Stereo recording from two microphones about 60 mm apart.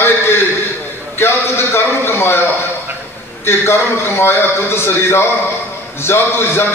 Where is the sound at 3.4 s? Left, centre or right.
Left.